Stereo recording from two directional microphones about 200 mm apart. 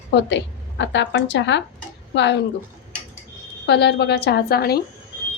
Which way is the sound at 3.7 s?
55° left (ahead or behind).